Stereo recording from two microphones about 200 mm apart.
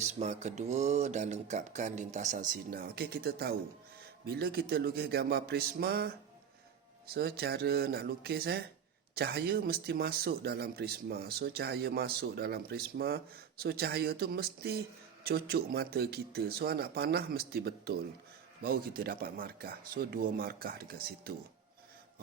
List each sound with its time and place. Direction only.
0.0 s speech: 35° right (ahead or behind); by 6.1 s 50° right (ahead or behind)
7.1 s speech: 50° right (ahead or behind)